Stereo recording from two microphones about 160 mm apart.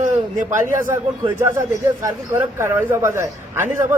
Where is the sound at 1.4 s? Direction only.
15° right (ahead or behind).